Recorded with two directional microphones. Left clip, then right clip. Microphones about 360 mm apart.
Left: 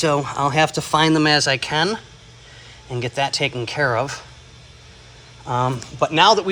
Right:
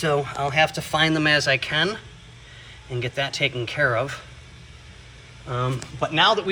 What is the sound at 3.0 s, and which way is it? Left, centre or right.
Speech, centre.